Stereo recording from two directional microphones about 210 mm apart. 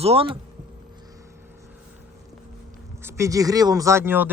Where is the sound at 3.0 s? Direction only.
15° right (ahead or behind).